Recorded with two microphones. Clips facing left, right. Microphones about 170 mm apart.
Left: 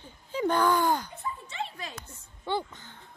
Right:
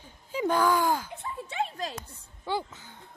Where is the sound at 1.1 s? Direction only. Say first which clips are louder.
Right 1 dB; 60° right (ahead or behind).